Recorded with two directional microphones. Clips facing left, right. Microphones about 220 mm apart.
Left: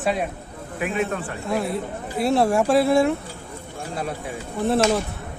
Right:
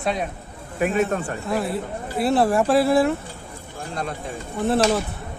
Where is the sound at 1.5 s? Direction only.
Centre (ahead or behind).